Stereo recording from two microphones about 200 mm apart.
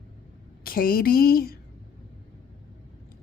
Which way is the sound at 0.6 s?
45° left (ahead or behind).